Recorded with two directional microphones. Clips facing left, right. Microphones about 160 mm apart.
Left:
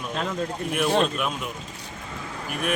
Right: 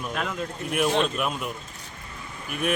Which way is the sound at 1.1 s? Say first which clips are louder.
Even; centre (ahead or behind).